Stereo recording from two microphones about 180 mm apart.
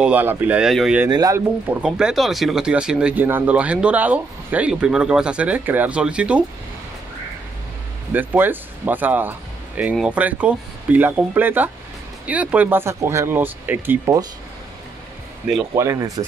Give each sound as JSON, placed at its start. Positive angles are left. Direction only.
{"t": 0.0, "sound": "speech", "side_deg": -10}
{"t": 1.1, "sound": "speech", "side_deg": -15}
{"t": 1.8, "sound": "speech", "side_deg": -5}
{"t": 8.1, "sound": "speech", "side_deg": -10}
{"t": 15.7, "sound": "speech", "side_deg": -15}